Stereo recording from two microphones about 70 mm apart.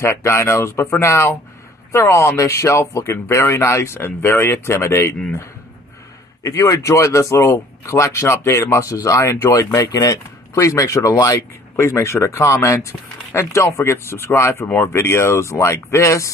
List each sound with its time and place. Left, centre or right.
0.0 s speech: left
6.4 s speech: left
11.7 s speech: left
15.0 s speech: left